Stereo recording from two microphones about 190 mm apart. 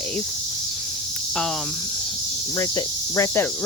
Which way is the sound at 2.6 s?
15° left (ahead or behind).